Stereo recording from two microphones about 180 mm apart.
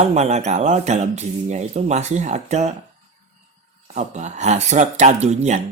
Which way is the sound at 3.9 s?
40° right (ahead or behind).